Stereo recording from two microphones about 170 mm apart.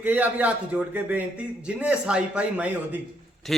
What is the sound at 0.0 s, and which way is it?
Speech, 10° right (ahead or behind).